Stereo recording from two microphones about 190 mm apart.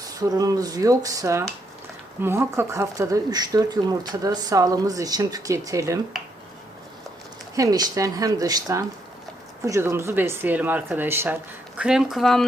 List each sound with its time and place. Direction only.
0.0 s speech: 20° right (ahead or behind)
7.5 s a woman's voice: 20° right (ahead or behind); by 12.5 s centre (ahead or behind)